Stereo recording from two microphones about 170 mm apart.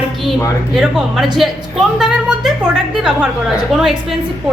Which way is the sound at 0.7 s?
Centre (ahead or behind).